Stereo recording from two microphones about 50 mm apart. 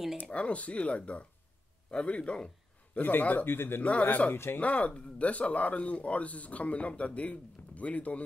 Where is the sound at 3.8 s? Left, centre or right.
Left.